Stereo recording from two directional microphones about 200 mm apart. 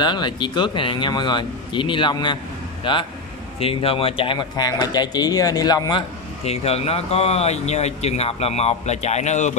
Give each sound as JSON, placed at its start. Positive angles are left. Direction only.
{"t": 0.0, "sound": "speech", "side_deg": 20}